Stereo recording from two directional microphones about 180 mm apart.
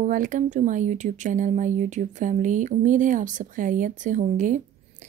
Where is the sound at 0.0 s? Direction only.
45° right (ahead or behind).